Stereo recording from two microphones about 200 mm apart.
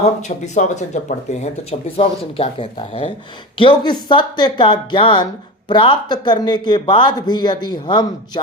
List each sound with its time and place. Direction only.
0.0 s speech: 35° left (ahead or behind)